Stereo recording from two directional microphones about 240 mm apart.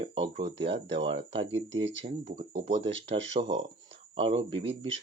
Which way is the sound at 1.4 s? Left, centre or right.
Right.